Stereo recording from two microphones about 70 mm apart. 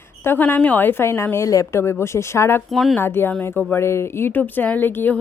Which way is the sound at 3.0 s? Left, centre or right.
Left.